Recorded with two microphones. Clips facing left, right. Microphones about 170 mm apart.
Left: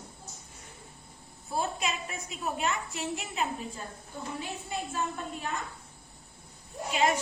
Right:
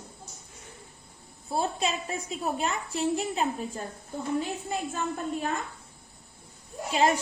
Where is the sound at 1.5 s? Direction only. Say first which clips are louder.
Right 3 dB; 30° right (ahead or behind).